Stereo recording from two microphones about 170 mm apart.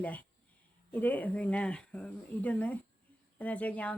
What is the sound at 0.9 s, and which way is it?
Speech, 10° left (ahead or behind).